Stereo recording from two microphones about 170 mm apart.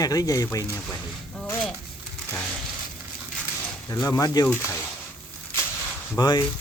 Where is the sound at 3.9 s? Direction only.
20° left (ahead or behind).